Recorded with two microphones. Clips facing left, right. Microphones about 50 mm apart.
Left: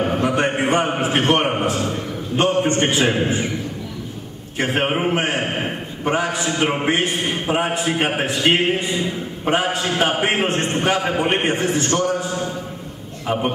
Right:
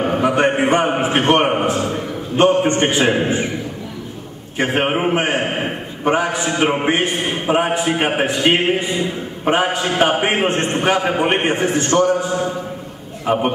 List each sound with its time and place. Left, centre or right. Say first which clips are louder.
0.0 s a man's voice: right 3 dB; centre
4.6 s a man's voice: right 2 dB; centre